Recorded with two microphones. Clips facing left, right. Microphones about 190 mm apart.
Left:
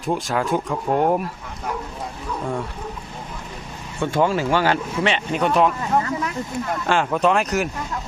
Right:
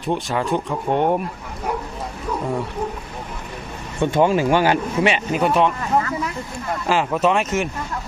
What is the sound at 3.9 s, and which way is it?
Speech, 20° right (ahead or behind).